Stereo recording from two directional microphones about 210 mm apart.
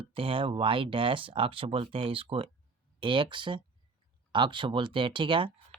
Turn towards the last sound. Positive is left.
turn(degrees=-25)  # may be behind; listen again after turning